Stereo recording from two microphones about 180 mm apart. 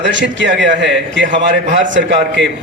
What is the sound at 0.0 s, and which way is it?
A man's voice, 90° right.